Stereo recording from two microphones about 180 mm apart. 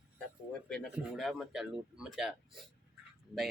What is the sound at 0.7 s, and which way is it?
Speech, centre (ahead or behind).